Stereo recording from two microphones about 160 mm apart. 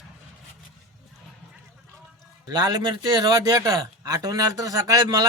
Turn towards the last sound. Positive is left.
turn(degrees=-25)  # may be behind; listen again after turning